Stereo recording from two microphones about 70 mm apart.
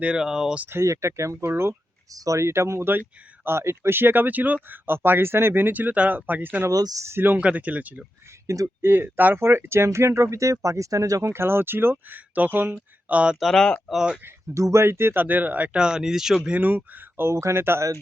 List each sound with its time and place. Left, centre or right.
0.2 s speech: centre
0.7 s speech: right
2.1 s speech: right
6.7 s speech: right
7.2 s speech: right
8.4 s speech: right
8.8 s speech: right
11.3 s speech: right
12.7 s speech: centre
13.4 s speech: centre
13.9 s speech: centre
14.3 s speech: right; by 16.6 s centre
16.6 s speech: right